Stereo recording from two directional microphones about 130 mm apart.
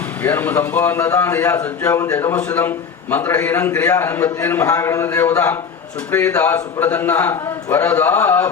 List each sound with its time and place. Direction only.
0.2 s a man's voice: 15° left (ahead or behind)